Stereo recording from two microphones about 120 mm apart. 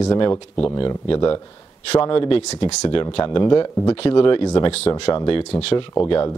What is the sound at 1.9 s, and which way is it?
Speech, 50° left (ahead or behind).